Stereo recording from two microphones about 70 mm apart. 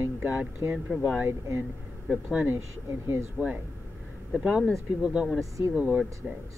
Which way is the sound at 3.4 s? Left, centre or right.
Centre.